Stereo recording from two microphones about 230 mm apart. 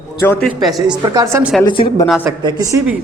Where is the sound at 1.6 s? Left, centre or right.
Centre.